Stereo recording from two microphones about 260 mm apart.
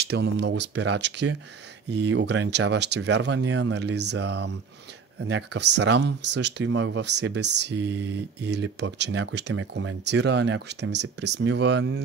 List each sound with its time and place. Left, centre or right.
0.0 s speech: right